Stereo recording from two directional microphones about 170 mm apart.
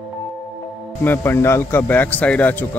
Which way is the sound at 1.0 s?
15° left (ahead or behind).